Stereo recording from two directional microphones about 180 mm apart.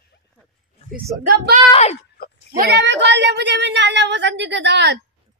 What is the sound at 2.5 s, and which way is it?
A woman's voice, 65° right (ahead or behind).